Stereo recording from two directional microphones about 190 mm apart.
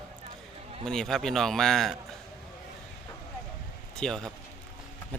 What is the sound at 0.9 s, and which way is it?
A man's voice, centre (ahead or behind).